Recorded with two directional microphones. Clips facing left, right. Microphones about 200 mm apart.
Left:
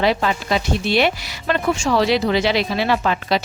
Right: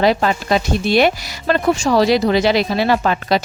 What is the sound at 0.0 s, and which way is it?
Speech, 40° right (ahead or behind).